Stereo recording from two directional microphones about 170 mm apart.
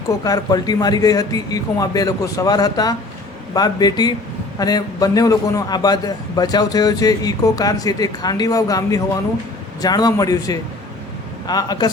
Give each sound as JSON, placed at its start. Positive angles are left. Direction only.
{"t": 0.3, "sound": "a man's voice", "side_deg": 20}